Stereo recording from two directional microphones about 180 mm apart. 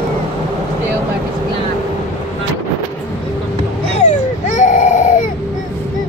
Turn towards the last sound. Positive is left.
turn(degrees=45)  # may be behind; listen again after turning